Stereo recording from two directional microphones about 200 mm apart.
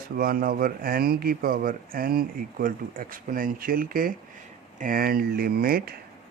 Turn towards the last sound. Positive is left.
turn(degrees=-50)  # may be behind; listen again after turning